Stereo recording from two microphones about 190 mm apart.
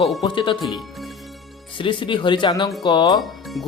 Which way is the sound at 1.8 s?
25° left (ahead or behind).